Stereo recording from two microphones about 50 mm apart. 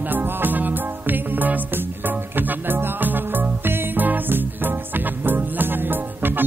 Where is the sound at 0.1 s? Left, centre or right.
Right.